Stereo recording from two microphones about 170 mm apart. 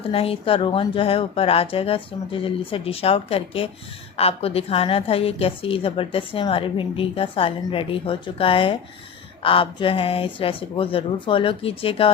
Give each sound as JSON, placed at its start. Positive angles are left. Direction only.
{"t": 0.1, "sound": "a woman's voice", "side_deg": 35}